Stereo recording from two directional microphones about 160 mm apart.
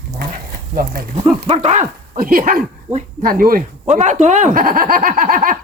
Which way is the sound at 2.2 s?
65° right (ahead or behind).